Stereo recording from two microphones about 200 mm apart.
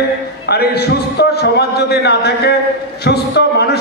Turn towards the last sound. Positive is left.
turn(degrees=55)  # may be behind; listen again after turning